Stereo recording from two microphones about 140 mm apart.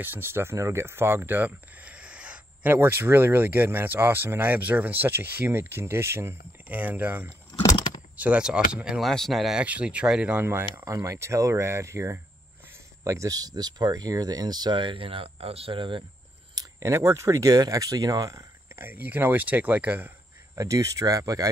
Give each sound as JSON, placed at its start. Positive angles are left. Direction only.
{"t": 0.0, "sound": "speech", "side_deg": -15}
{"t": 7.6, "sound": "a sound", "side_deg": 30}
{"t": 8.2, "sound": "speech", "side_deg": -10}
{"t": 16.5, "sound": "speech", "side_deg": -20}
{"t": 20.5, "sound": "speech", "side_deg": -25}